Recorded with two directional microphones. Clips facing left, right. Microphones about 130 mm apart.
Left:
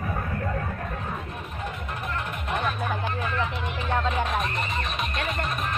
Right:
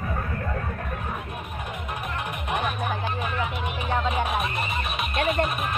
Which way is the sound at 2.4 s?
15° right (ahead or behind).